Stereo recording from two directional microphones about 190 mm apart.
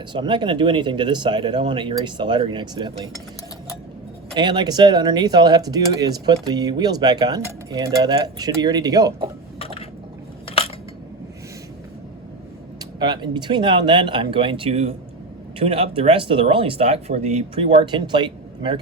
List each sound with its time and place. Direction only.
0.1 s speech: 25° right (ahead or behind)
4.4 s speech: 20° right (ahead or behind)
9.6 s squish: 30° left (ahead or behind)
13.0 s speech: 25° right (ahead or behind)